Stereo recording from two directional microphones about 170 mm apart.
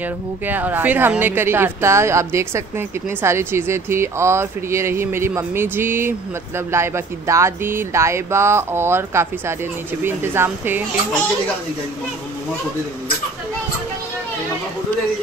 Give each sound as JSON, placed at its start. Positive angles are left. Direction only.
{"t": 0.5, "sound": "speech", "side_deg": -10}